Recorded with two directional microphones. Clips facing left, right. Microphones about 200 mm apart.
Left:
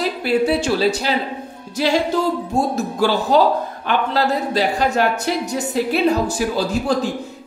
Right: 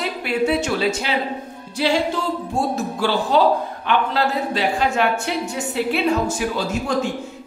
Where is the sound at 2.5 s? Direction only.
40° left (ahead or behind).